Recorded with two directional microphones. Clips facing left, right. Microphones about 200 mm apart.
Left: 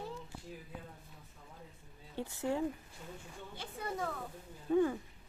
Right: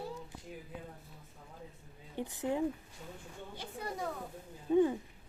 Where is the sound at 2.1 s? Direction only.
15° right (ahead or behind).